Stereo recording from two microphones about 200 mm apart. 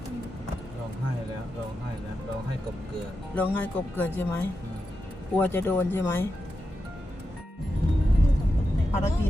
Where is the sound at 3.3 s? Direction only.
10° left (ahead or behind).